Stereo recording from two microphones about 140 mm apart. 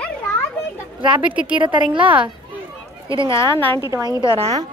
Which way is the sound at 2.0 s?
10° right (ahead or behind).